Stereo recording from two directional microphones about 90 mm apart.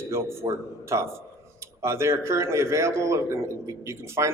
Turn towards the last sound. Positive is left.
turn(degrees=-30)  # may be behind; listen again after turning